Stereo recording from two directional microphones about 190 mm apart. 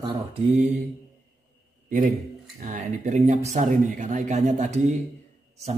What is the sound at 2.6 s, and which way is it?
Speech, 40° right (ahead or behind).